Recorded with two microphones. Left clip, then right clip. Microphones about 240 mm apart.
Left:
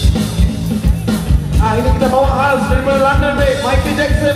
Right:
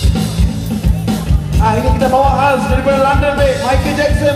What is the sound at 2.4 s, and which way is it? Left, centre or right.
Music, right.